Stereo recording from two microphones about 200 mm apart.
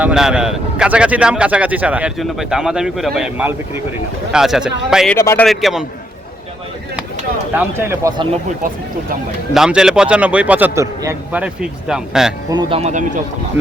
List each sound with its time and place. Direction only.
0.0 s speech: 5° right (ahead or behind)
5.1 s a man's voice: 15° left (ahead or behind)
5.5 s speech: centre (ahead or behind)
7.5 s speech: 10° right (ahead or behind)
9.6 s speech: 5° right (ahead or behind)
12.5 s speech: 20° right (ahead or behind)
12.8 s speech: 40° right (ahead or behind)